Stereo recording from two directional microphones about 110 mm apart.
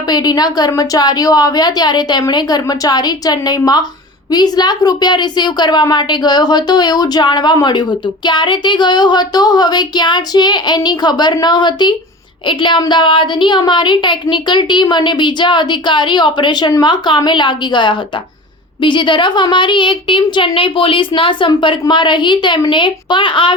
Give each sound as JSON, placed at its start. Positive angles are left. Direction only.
{"t": 0.1, "sound": "a woman's voice", "side_deg": 40}